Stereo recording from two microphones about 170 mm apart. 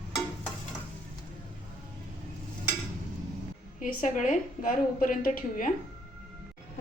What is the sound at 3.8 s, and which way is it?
A woman's voice, 50° left (ahead or behind).